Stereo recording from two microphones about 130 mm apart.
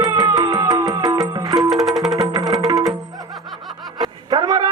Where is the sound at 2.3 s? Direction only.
30° right (ahead or behind).